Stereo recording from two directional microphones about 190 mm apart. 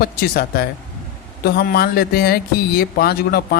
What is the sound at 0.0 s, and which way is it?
Speech, 55° left (ahead or behind).